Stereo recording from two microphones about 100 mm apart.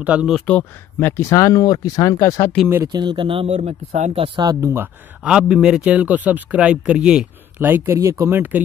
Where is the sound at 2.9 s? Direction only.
50° right (ahead or behind); by 4.3 s 90° right.